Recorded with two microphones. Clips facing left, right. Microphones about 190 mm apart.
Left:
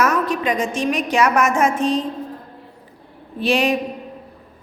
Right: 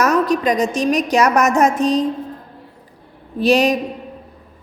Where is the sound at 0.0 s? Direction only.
40° right (ahead or behind).